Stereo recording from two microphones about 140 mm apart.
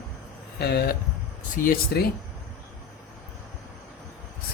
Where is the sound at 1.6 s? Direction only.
90° left.